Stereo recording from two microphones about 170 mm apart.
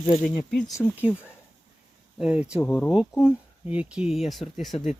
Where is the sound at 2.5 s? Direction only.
10° left (ahead or behind).